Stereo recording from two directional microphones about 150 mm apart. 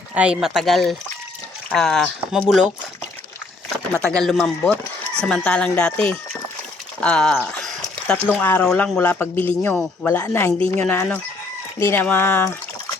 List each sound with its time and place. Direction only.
0.1 s speech: 10° right (ahead or behind)
4.0 s speech: 5° left (ahead or behind)